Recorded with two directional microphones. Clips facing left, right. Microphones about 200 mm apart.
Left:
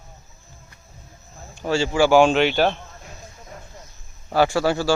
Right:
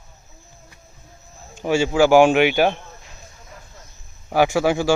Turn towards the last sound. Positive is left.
turn(degrees=-15)  # may be behind; listen again after turning